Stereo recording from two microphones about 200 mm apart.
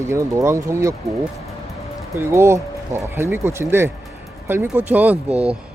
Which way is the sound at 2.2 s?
15° right (ahead or behind).